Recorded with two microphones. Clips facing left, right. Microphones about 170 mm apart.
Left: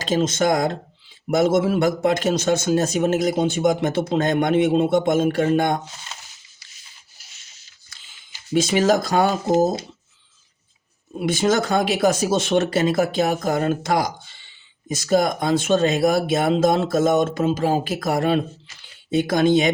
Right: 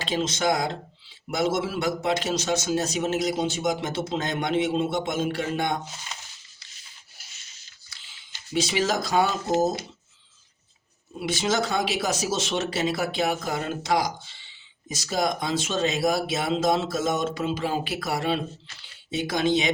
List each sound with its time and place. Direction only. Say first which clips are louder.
0.0 s a man's voice: left 6 dB; 45° left (ahead or behind)
8.5 s a man's voice: left 7 dB; 50° left (ahead or behind)
11.2 s a man's voice: left 6 dB; 50° left (ahead or behind)